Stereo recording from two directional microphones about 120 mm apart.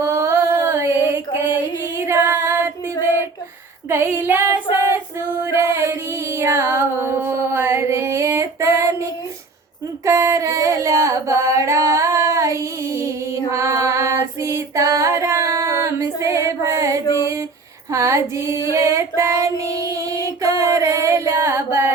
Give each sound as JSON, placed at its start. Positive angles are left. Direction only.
{"t": 0.0, "sound": "a sound", "side_deg": -25}
{"t": 2.0, "sound": "female singing", "side_deg": -20}
{"t": 5.4, "sound": "music", "side_deg": -20}
{"t": 10.1, "sound": "singing", "side_deg": -25}
{"t": 17.9, "sound": "female singing", "side_deg": -25}